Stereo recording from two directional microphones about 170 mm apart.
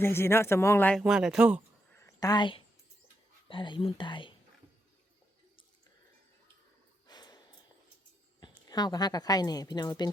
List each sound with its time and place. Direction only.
0.0 s speech: 15° left (ahead or behind)
0.9 s speech: 5° right (ahead or behind)
2.0 s a sound: 20° left (ahead or behind)
3.5 s speech: 30° left (ahead or behind)
7.1 s snort: 25° left (ahead or behind)
8.4 s a woman's voice: 25° left (ahead or behind)